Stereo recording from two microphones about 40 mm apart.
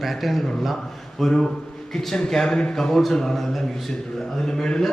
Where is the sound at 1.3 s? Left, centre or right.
Centre.